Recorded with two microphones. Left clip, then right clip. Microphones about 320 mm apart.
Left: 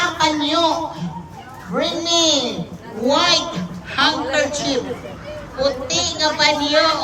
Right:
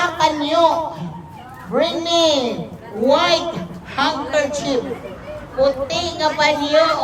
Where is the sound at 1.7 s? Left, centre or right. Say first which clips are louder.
Right 2 dB; right.